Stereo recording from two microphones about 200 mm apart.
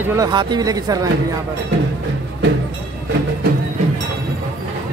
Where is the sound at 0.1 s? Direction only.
20° right (ahead or behind).